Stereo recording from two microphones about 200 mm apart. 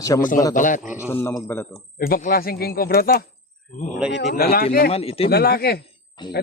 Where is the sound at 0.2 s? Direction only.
40° left (ahead or behind).